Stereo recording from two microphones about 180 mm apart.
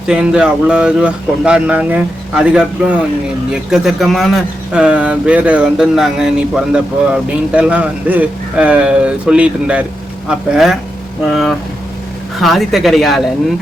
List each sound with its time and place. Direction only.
0.1 s speech: 5° right (ahead or behind)